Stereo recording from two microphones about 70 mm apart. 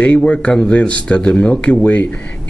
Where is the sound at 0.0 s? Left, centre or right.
Centre.